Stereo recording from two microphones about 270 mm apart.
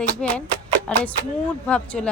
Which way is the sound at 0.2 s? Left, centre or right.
Centre.